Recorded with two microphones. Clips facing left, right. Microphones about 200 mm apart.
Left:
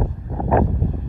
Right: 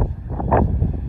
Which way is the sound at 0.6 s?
Centre (ahead or behind).